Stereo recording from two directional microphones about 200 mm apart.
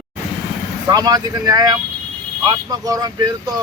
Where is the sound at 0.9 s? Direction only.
20° right (ahead or behind).